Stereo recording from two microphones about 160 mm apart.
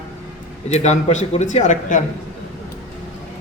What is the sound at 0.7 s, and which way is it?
Speech, 45° left (ahead or behind).